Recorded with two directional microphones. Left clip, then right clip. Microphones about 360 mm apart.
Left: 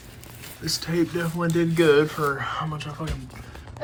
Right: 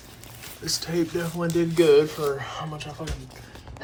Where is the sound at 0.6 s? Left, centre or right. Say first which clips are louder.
Left 1 dB; centre.